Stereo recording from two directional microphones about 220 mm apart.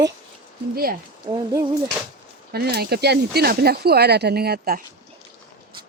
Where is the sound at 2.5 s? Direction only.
45° right (ahead or behind).